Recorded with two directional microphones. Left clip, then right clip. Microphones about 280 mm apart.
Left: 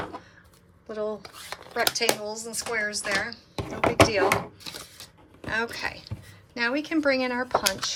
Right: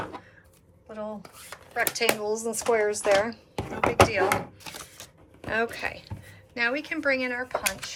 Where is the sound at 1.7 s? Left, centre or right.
Centre.